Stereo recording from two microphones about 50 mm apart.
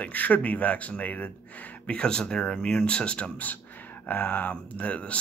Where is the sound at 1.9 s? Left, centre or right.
Centre.